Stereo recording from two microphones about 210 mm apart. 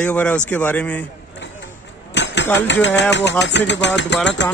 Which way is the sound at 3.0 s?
60° left (ahead or behind).